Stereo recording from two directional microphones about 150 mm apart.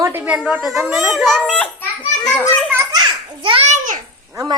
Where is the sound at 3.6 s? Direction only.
55° right (ahead or behind).